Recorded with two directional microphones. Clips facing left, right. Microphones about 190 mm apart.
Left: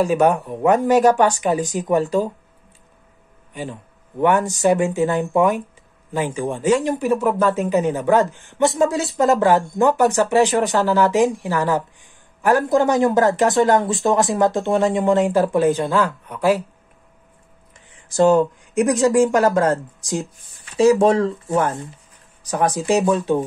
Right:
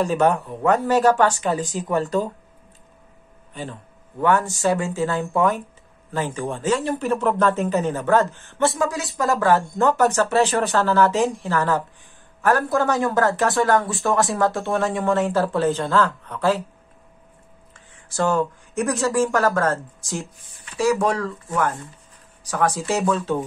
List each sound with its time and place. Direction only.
0.0 s a man's voice: 15° left (ahead or behind)
4.2 s a man's voice: 15° left (ahead or behind)
8.7 s a man's voice: 25° left (ahead or behind)
18.1 s a man's voice: 20° left (ahead or behind)